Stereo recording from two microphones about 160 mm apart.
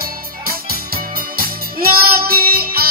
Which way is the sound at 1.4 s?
70° right (ahead or behind).